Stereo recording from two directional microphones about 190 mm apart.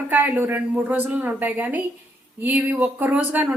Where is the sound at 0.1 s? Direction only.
10° right (ahead or behind).